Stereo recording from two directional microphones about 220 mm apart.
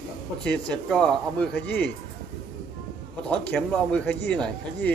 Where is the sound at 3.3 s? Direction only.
5° left (ahead or behind).